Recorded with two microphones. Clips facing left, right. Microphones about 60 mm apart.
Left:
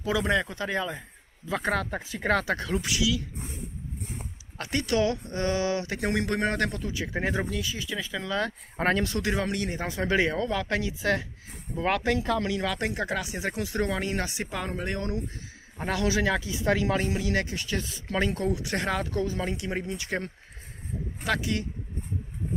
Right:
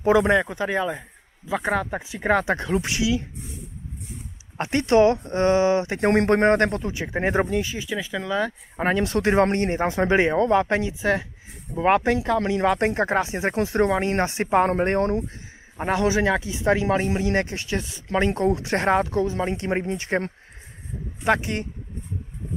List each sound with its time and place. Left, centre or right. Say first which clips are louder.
0.0 s speech: right 8 dB; right
0.4 s speech: right 5 dB; centre
4.6 s speech: right 8 dB; right
7.9 s speech: right 5 dB; centre
8.9 s speech: right 7 dB; right